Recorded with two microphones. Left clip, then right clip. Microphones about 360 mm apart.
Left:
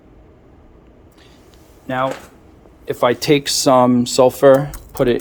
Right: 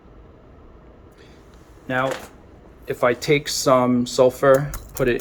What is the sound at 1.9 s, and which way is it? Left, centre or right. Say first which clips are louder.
Speech: left 2 dB; centre.